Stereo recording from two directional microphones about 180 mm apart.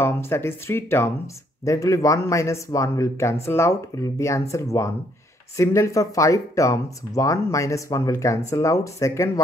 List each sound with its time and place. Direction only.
0.0 s speech: 15° left (ahead or behind)